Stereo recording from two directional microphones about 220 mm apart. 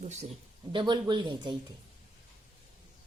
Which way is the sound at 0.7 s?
20° right (ahead or behind).